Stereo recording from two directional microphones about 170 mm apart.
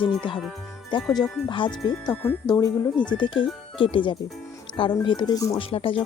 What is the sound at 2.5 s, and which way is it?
Speech, 25° left (ahead or behind).